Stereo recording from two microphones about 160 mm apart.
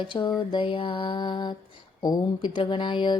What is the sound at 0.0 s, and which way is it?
Speech, 30° left (ahead or behind).